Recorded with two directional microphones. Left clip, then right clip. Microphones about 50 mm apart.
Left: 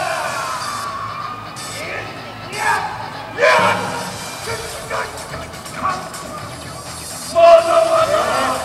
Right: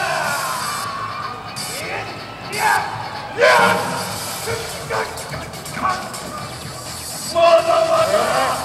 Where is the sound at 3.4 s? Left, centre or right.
Right.